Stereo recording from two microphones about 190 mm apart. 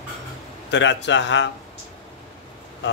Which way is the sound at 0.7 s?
70° left (ahead or behind).